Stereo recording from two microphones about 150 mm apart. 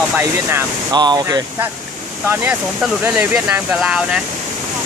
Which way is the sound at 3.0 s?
10° right (ahead or behind).